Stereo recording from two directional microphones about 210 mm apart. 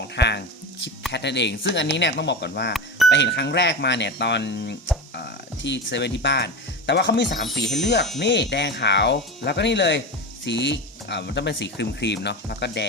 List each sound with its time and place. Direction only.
0.2 s a sound: 55° left (ahead or behind)
1.1 s speech: 55° left (ahead or behind)
7.8 s chime: 55° left (ahead or behind)
8.2 s speech: 55° left (ahead or behind)